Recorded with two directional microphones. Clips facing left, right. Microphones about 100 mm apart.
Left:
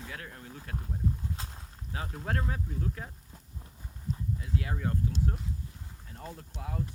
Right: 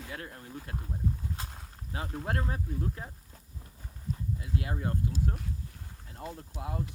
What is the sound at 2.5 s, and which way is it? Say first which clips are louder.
Speech: right 1 dB; 30° right (ahead or behind).